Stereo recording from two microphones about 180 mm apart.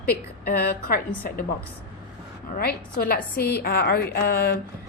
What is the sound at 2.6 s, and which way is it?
A woman's voice, 55° left (ahead or behind).